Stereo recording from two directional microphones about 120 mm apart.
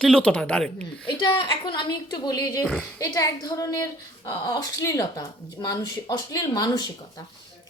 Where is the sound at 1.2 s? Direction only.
40° left (ahead or behind).